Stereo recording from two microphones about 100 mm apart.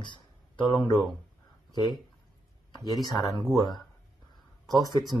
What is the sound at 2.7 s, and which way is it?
Speech, 40° left (ahead or behind).